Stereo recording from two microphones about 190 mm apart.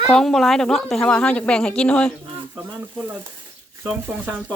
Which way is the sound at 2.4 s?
10° right (ahead or behind).